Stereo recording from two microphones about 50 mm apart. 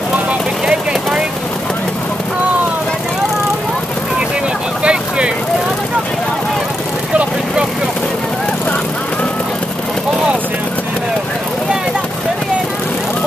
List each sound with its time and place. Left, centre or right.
4.8 s vehicle: right